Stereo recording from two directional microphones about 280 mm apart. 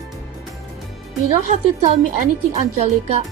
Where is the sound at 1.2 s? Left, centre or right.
Right.